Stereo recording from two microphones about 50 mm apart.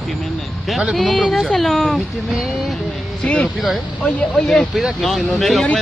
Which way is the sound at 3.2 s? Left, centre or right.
Left.